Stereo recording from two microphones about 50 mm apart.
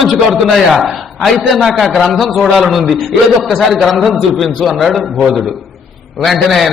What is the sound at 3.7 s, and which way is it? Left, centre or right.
A man's voice, centre.